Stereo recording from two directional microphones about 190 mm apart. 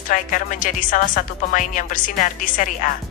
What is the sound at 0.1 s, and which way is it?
A woman's voice, 45° left (ahead or behind).